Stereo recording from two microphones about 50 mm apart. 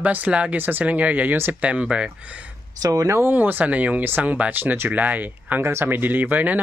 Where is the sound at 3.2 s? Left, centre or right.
Right.